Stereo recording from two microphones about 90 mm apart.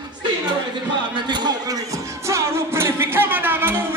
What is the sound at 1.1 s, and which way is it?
Speech, 55° right (ahead or behind).